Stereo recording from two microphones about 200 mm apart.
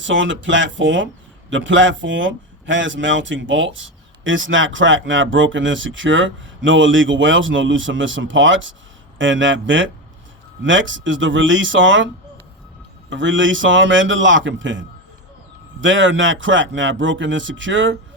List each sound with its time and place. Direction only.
0.0 s speech: 70° right (ahead or behind)
13.1 s speech: 70° right (ahead or behind)